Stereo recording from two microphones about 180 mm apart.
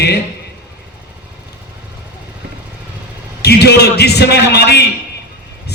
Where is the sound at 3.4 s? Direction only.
65° left (ahead or behind).